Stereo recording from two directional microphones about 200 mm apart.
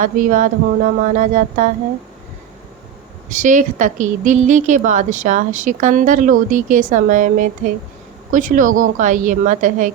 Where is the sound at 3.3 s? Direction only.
40° right (ahead or behind).